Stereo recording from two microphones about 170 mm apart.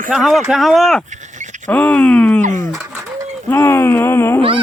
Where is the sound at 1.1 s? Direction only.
45° right (ahead or behind).